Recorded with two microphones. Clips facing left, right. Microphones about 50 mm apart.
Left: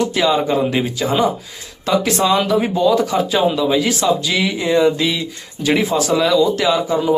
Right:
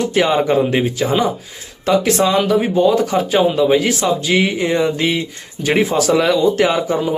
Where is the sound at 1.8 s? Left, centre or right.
Right.